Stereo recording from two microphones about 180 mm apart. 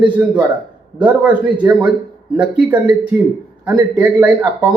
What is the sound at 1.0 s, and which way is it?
Speech, 5° right (ahead or behind).